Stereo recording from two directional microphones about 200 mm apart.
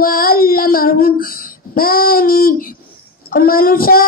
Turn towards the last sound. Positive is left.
turn(degrees=45)  # may be behind; listen again after turning